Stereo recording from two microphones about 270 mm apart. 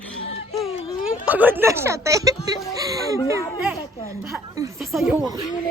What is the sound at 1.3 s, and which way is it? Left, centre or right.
Speech, centre.